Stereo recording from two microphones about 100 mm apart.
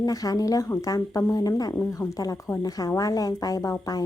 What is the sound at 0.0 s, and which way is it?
A woman's voice, 35° left (ahead or behind).